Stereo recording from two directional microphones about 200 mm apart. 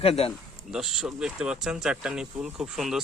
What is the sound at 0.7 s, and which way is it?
A man's voice, centre (ahead or behind).